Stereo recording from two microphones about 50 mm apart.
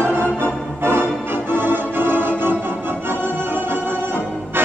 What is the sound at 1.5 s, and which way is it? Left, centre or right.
Organ, right.